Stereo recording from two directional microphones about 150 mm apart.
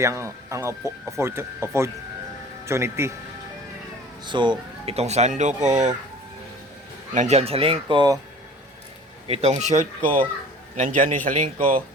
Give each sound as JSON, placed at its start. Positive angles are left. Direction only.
{"t": 0.0, "sound": "speech", "side_deg": -20}
{"t": 4.3, "sound": "speech", "side_deg": -30}
{"t": 7.1, "sound": "speech", "side_deg": -50}
{"t": 9.2, "sound": "a man's voice", "side_deg": -45}